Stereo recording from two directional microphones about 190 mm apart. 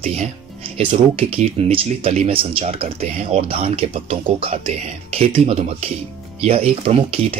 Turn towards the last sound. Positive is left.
turn(degrees=-30)  # may be behind; listen again after turning